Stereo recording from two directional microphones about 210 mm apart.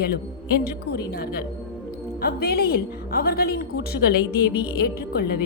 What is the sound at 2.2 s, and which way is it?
A woman's voice, 50° left (ahead or behind).